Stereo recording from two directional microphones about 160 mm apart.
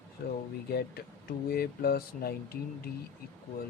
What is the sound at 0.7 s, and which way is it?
Speech, 75° left (ahead or behind).